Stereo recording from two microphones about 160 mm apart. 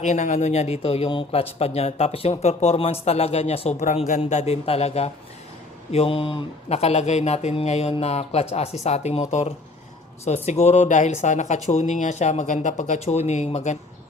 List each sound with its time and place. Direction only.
0.0 s speech: 45° left (ahead or behind)
10.2 s speech: 45° left (ahead or behind)